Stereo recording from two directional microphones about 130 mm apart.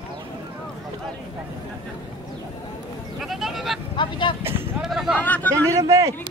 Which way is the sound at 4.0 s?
35° left (ahead or behind).